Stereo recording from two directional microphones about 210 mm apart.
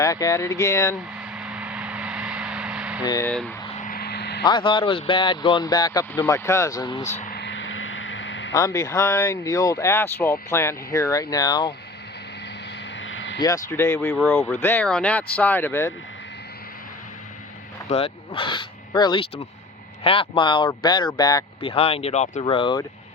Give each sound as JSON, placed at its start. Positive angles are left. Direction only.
{"t": 0.0, "sound": "speech", "side_deg": 15}
{"t": 1.4, "sound": "vehicle", "side_deg": -5}
{"t": 3.1, "sound": "speech", "side_deg": 15}
{"t": 3.8, "sound": "vehicle", "side_deg": 40}
{"t": 4.4, "sound": "speech", "side_deg": 25}
{"t": 7.0, "sound": "speech", "side_deg": 35}
{"t": 7.3, "sound": "vehicle", "side_deg": 60}
{"t": 8.5, "sound": "speech", "side_deg": 15}
{"t": 13.0, "sound": "vehicle", "side_deg": 65}
{"t": 13.4, "sound": "speech", "side_deg": 15}
{"t": 14.1, "sound": "speech", "side_deg": 0}
{"t": 17.8, "sound": "speech", "side_deg": 30}